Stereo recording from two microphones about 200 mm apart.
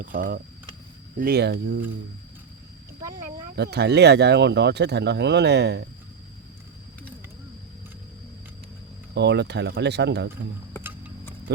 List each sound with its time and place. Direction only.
0.0 s speech: 40° right (ahead or behind)
3.5 s speech: 55° right (ahead or behind)
9.1 s speech: 60° right (ahead or behind)